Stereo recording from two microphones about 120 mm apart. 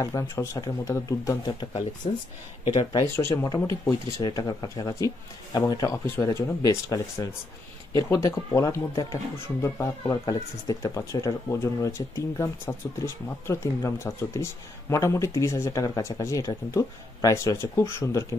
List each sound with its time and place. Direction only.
0.0 s speech: 25° left (ahead or behind)
2.0 s speech: 50° left (ahead or behind)
3.2 s speech: 20° left (ahead or behind)
6.0 s speech: 20° left (ahead or behind)